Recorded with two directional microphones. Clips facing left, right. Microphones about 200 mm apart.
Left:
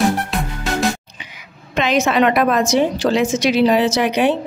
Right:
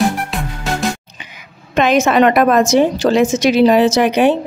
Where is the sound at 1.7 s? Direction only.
50° right (ahead or behind).